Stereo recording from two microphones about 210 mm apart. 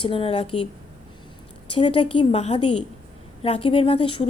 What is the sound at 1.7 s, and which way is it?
A woman's voice, 25° left (ahead or behind).